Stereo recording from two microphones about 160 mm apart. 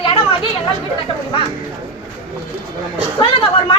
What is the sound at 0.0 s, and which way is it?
Chatter, 30° left (ahead or behind).